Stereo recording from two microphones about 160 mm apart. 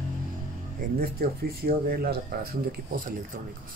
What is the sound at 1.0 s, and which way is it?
Speech, 70° right (ahead or behind).